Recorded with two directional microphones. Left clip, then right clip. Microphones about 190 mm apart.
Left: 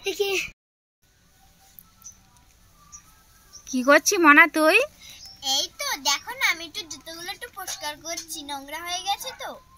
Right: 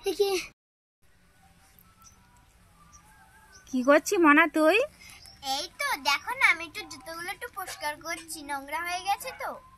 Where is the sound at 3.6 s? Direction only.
Centre (ahead or behind).